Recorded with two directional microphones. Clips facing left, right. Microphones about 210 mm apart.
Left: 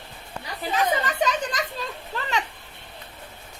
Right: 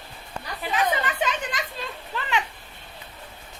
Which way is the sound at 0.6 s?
40° left (ahead or behind).